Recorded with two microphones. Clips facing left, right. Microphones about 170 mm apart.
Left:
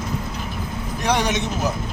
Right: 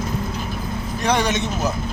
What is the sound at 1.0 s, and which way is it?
Speech, 15° left (ahead or behind).